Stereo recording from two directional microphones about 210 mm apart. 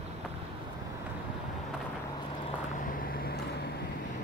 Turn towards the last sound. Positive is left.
turn(degrees=45)  # may be behind; listen again after turning